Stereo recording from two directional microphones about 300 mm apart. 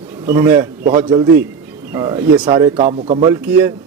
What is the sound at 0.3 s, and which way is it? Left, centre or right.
Speech, centre.